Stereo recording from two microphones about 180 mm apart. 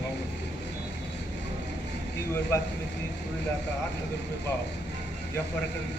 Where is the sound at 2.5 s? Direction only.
15° left (ahead or behind).